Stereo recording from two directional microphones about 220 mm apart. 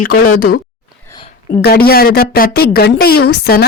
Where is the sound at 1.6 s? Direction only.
45° left (ahead or behind).